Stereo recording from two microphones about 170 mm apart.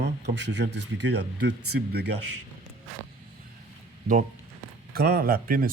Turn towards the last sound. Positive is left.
turn(degrees=-60)  # may be behind; listen again after turning